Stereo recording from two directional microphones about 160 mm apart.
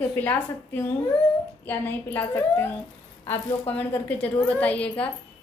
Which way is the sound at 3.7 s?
10° left (ahead or behind).